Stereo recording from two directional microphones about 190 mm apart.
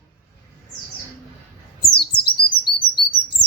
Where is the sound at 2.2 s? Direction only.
55° left (ahead or behind).